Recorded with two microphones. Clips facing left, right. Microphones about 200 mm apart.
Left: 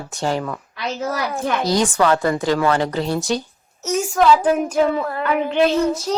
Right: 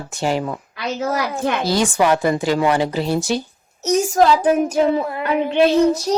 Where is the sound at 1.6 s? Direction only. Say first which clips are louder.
Even; 5° right (ahead or behind).